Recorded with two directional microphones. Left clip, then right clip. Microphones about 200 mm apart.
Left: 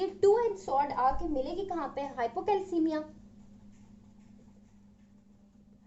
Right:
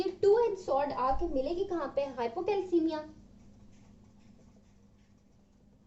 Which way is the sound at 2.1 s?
40° left (ahead or behind).